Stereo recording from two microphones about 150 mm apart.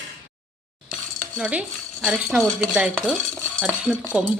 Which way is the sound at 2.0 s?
5° right (ahead or behind).